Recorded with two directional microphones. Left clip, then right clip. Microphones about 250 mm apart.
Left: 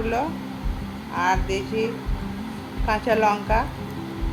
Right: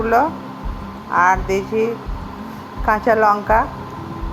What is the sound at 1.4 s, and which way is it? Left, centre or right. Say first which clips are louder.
Speech: right 6 dB; right.